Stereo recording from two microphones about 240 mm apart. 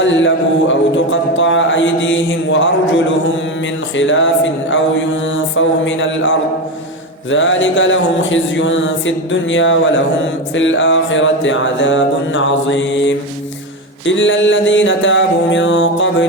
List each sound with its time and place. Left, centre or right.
0.0 s mantra: left